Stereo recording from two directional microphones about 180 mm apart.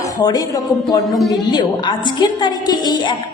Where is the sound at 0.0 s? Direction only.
20° left (ahead or behind).